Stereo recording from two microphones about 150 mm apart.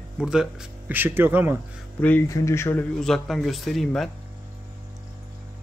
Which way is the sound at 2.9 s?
5° left (ahead or behind).